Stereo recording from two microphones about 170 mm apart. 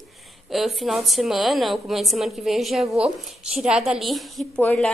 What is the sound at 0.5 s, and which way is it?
A woman's voice, centre (ahead or behind).